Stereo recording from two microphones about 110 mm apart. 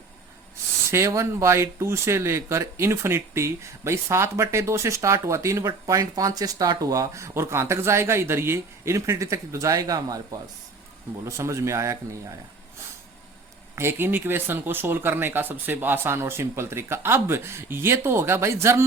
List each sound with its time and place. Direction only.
0.9 s speech: 25° right (ahead or behind)
11.3 s speech: 25° right (ahead or behind)
13.7 s speech: 20° right (ahead or behind)